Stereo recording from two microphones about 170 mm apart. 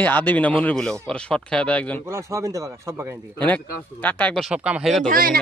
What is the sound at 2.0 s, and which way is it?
Speech, 15° right (ahead or behind).